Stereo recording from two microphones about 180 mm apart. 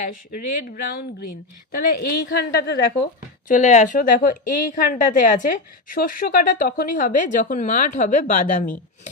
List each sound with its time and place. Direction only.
0.3 s a woman's voice: 50° left (ahead or behind); by 3.1 s 65° left (ahead or behind)
3.5 s speech: 40° left (ahead or behind)